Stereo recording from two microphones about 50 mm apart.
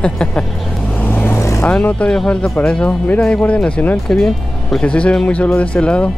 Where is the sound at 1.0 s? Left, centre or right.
Left.